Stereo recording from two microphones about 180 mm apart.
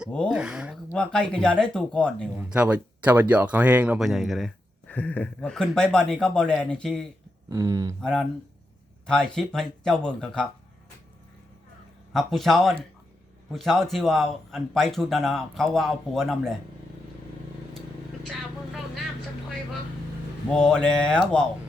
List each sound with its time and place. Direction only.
0.0 s speech: centre (ahead or behind)
2.3 s speech: 10° right (ahead or behind)
7.5 s speech: 20° right (ahead or behind)
8.0 s speech: 5° left (ahead or behind)
12.1 s speech: centre (ahead or behind)
20.5 s speech: 5° left (ahead or behind)